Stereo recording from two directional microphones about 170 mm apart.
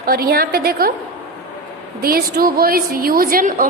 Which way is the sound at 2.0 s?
60° right (ahead or behind).